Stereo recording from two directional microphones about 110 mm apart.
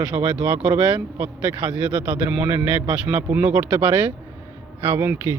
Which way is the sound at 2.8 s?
15° right (ahead or behind).